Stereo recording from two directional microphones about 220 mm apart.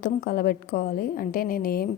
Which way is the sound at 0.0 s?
45° left (ahead or behind).